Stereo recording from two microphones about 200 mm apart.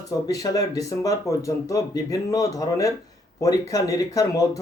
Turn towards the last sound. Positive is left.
turn(degrees=15)  # may be behind; listen again after turning